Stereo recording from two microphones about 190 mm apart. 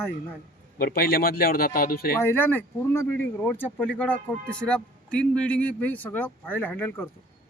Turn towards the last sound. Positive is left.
turn(degrees=10)  # may be behind; listen again after turning